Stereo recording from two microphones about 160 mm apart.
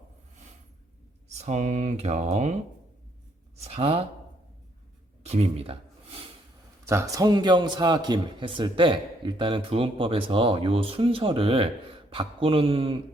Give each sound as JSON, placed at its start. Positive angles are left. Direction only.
{"t": 1.4, "sound": "speech", "side_deg": -45}
{"t": 3.6, "sound": "a man's voice", "side_deg": -40}
{"t": 5.2, "sound": "a sound", "side_deg": -40}
{"t": 6.8, "sound": "a man's voice", "side_deg": -20}